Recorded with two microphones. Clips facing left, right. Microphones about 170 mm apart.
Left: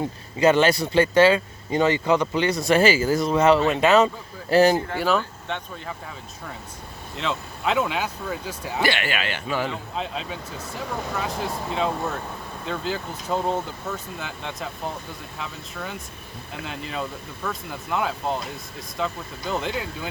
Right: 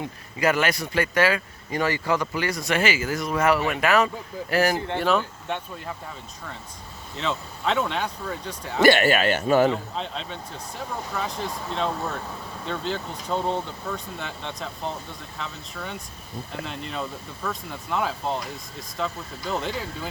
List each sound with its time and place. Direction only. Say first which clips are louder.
0.0 s speech: left 5 dB; 25° left (ahead or behind)
4.9 s speech: even; centre (ahead or behind)
7.2 s speech: even; centre (ahead or behind)
8.8 s a man's voice: right 8 dB; 45° right (ahead or behind)
9.9 s speech: left 2 dB; 5° left (ahead or behind)